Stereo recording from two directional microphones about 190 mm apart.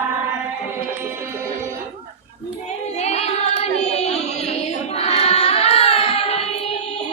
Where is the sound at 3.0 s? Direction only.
35° left (ahead or behind).